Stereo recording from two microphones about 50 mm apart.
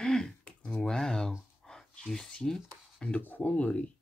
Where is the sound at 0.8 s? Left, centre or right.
Centre.